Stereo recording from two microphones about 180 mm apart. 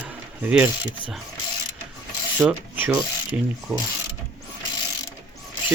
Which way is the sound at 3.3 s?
10° right (ahead or behind).